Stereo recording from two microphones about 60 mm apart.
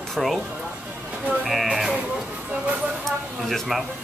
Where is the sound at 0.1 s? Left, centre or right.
Centre.